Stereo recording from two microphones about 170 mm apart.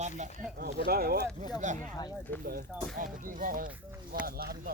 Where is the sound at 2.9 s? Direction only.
55° right (ahead or behind).